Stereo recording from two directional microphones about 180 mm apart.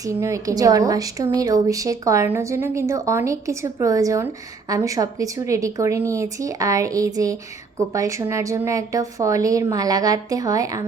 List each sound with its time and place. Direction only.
0.2 s a woman's voice: 15° right (ahead or behind)